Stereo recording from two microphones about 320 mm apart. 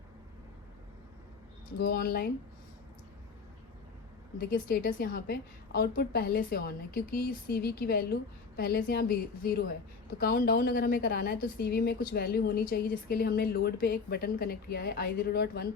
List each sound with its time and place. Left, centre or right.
1.8 s a woman's voice: left
4.4 s a woman's voice: left